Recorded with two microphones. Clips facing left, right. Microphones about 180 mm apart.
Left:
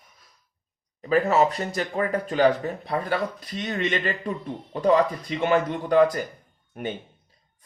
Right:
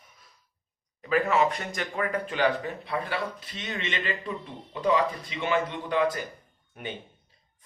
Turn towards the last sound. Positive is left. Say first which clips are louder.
# left 6 dB
turn(degrees=45)  # may be behind; listen again after turning